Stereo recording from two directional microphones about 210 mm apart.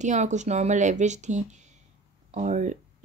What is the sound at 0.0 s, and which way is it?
Speech, 35° right (ahead or behind).